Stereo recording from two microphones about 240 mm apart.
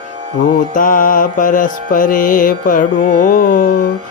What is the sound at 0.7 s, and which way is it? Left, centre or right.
Music, left.